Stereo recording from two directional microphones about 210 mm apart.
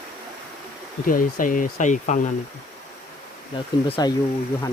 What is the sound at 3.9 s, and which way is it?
Speech, 20° left (ahead or behind).